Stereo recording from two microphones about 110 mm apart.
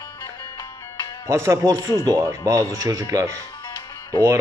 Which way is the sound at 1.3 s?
25° right (ahead or behind).